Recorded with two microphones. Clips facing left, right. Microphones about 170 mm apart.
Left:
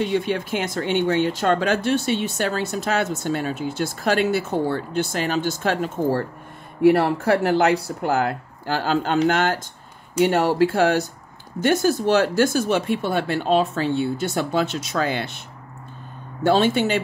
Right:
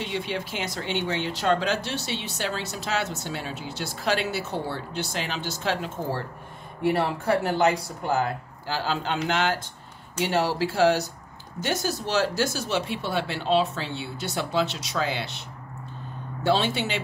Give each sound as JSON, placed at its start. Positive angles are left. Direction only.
{"t": 0.0, "sound": "speech", "side_deg": 50}
{"t": 6.8, "sound": "speech", "side_deg": 60}
{"t": 16.4, "sound": "speech", "side_deg": 50}